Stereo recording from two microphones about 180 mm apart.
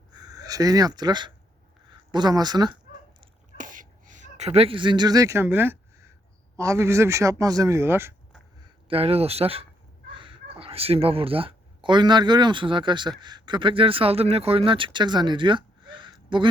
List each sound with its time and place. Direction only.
0.1 s speech: 20° right (ahead or behind)
3.6 s a sound: 45° right (ahead or behind); by 6.1 s 15° right (ahead or behind)
6.6 s speech: 15° right (ahead or behind)
8.6 s speech: 30° right (ahead or behind)